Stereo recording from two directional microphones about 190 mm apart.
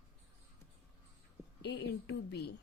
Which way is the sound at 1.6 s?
60° left (ahead or behind).